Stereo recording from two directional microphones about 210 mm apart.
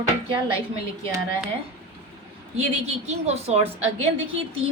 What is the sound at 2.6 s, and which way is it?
A woman's voice, 30° right (ahead or behind).